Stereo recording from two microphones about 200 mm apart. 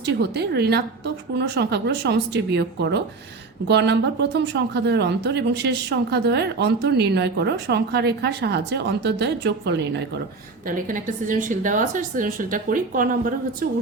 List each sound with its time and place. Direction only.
0.0 s speech: 55° right (ahead or behind)
10.7 s a woman's voice: 40° right (ahead or behind)